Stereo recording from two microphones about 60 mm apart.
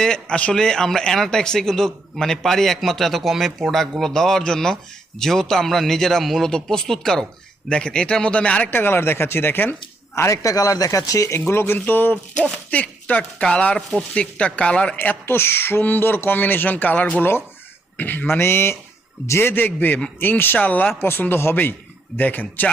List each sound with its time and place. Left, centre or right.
0.0 s a man's voice: centre
8.7 s speech: left
10.2 s speech: left
11.3 s speech: left; by 14.9 s centre
14.9 s speech: left